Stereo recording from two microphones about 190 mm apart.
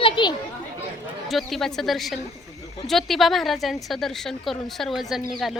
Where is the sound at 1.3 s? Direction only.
Centre (ahead or behind).